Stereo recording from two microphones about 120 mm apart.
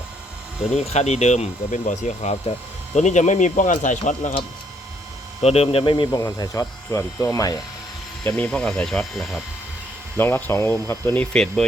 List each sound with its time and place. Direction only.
0.7 s speech: 65° left (ahead or behind); by 4.4 s 90° left
5.4 s speech: 60° left (ahead or behind)
6.1 s speech: 30° left (ahead or behind)
8.2 s speech: 10° left (ahead or behind)
10.2 s speech: 15° left (ahead or behind)